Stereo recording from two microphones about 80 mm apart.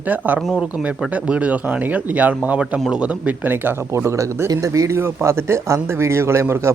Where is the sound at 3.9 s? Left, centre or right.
Right.